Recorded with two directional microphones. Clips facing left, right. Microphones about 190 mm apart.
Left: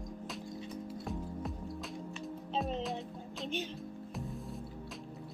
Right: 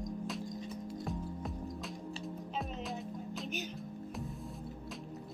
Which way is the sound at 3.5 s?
30° left (ahead or behind).